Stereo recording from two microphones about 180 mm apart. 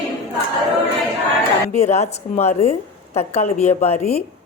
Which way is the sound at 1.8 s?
35° left (ahead or behind).